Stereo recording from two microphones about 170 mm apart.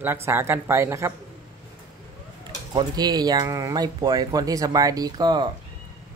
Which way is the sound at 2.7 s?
25° right (ahead or behind).